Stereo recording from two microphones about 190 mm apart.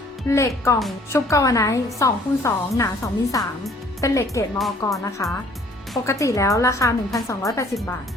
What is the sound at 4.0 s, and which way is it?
A woman's voice, 15° left (ahead or behind).